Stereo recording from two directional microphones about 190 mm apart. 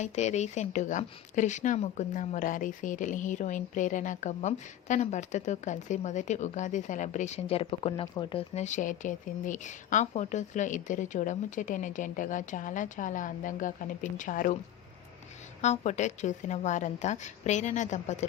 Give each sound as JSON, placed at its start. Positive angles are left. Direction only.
{"t": 0.0, "sound": "speech", "side_deg": 35}
{"t": 15.6, "sound": "speech", "side_deg": 35}